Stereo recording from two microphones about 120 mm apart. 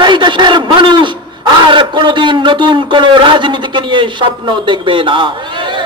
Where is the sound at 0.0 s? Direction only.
40° right (ahead or behind).